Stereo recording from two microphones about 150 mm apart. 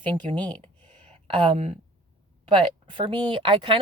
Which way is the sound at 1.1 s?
45° right (ahead or behind).